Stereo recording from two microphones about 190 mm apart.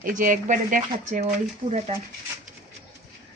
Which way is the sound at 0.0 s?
45° right (ahead or behind).